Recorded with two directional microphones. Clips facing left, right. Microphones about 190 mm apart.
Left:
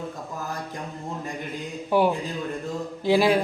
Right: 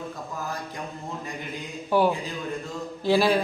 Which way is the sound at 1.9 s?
20° left (ahead or behind).